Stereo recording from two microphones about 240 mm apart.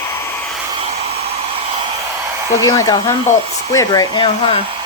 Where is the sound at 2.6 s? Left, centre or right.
Centre.